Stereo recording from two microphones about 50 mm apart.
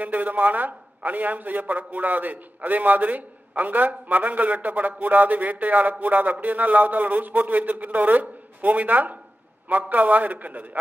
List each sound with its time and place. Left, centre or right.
0.0 s a man's voice: right